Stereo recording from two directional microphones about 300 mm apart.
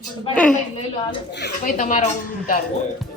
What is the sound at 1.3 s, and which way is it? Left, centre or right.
Speech, left.